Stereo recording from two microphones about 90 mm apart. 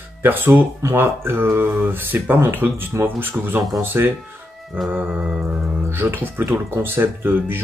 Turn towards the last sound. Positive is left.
turn(degrees=-20)  # may be behind; listen again after turning